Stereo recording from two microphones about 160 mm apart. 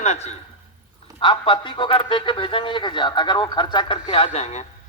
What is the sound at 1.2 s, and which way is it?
A man's voice, 30° left (ahead or behind).